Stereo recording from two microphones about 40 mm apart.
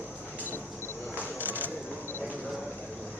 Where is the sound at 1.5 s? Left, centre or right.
Left.